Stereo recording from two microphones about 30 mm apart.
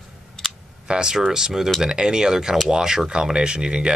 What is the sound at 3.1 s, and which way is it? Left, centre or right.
Speech, right.